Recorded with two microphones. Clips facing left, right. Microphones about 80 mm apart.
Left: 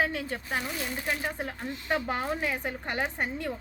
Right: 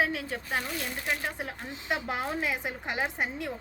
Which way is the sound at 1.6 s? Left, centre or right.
Centre.